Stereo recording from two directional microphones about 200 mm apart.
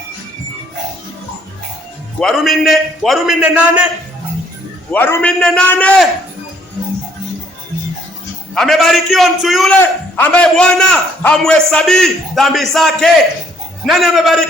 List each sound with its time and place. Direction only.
2.2 s a man's voice: centre (ahead or behind)
4.9 s a man's voice: 10° left (ahead or behind)
8.5 s a man's voice: centre (ahead or behind)